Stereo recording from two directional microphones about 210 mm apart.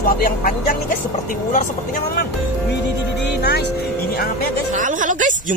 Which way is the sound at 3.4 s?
50° left (ahead or behind).